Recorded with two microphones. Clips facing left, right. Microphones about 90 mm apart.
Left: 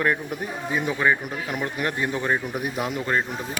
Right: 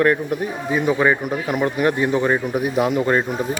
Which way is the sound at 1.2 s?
50° right (ahead or behind).